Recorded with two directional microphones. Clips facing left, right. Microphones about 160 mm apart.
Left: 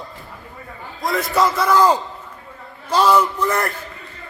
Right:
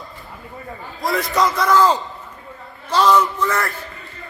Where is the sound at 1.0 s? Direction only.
Centre (ahead or behind).